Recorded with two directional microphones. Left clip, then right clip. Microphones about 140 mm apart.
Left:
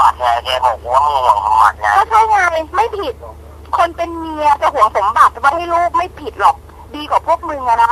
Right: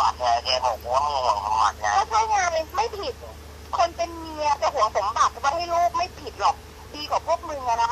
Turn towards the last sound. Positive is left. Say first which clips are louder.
# left 11 dB
turn(degrees=40)  # may be behind; listen again after turning